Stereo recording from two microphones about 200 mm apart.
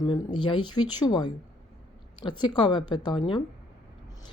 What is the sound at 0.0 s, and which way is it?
Speech, 20° left (ahead or behind).